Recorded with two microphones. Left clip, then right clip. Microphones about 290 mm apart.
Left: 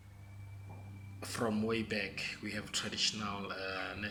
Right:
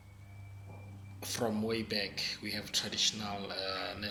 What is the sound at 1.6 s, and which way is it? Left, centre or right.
Speech, centre.